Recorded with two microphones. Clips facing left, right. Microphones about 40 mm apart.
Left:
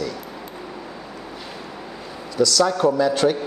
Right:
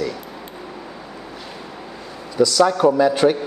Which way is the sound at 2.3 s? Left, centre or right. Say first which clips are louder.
Right 3 dB; centre.